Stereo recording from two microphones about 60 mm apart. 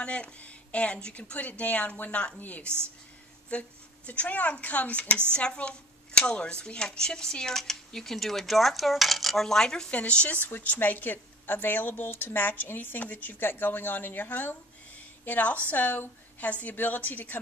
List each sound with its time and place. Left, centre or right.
0.0 s a woman's voice: centre
9.8 s speech: centre